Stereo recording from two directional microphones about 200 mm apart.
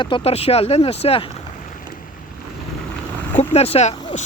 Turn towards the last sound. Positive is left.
turn(degrees=30)  # may be behind; listen again after turning